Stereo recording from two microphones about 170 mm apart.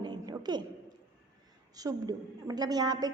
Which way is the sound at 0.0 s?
25° right (ahead or behind).